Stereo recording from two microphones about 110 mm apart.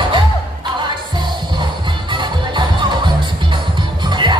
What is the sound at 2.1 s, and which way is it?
Music, 45° right (ahead or behind).